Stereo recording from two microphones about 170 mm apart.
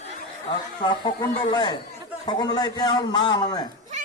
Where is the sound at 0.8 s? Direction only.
25° left (ahead or behind).